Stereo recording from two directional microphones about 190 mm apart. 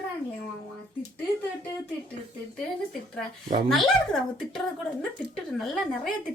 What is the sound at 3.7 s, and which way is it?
Speech, centre (ahead or behind).